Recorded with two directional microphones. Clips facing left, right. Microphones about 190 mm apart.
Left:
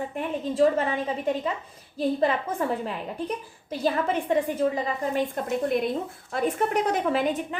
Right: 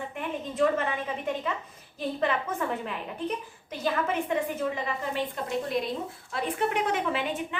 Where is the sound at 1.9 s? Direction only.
35° left (ahead or behind).